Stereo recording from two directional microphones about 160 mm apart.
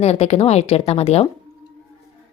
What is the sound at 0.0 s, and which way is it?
A woman's voice, 40° left (ahead or behind).